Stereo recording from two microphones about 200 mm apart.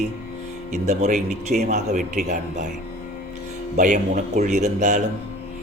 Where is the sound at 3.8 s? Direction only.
40° right (ahead or behind).